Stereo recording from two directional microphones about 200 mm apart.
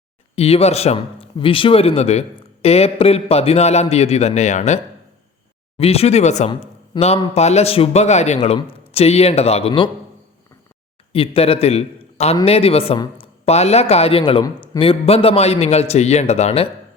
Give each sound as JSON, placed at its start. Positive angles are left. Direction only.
{"t": 0.3, "sound": "speech", "side_deg": 30}
{"t": 11.1, "sound": "a man's voice", "side_deg": 30}